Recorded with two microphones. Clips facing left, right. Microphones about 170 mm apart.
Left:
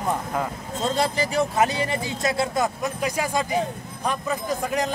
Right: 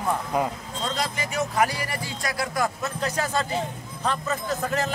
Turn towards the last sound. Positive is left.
turn(degrees=15)  # may be behind; listen again after turning